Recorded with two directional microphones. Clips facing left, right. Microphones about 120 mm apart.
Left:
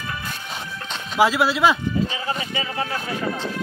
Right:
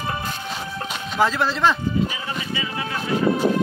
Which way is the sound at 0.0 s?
35° right (ahead or behind).